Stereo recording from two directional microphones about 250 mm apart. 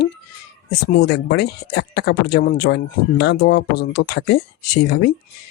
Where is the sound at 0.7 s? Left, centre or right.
Left.